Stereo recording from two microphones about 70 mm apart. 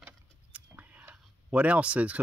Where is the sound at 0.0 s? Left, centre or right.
Centre.